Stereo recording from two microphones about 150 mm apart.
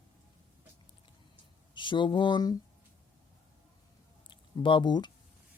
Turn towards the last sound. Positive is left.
turn(degrees=30)  # may be behind; listen again after turning